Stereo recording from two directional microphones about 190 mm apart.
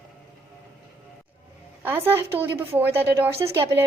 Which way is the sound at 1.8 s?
10° right (ahead or behind).